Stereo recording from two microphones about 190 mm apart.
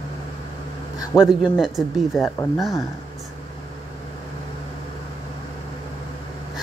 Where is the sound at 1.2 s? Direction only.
5° right (ahead or behind).